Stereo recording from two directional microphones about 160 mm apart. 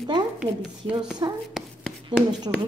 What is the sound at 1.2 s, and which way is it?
Speech, 30° right (ahead or behind).